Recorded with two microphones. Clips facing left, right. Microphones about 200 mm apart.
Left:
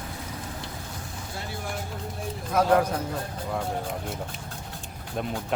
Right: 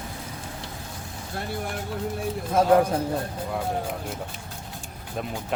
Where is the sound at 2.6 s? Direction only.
25° right (ahead or behind).